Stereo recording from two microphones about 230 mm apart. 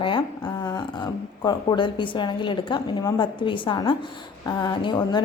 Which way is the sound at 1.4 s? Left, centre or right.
Centre.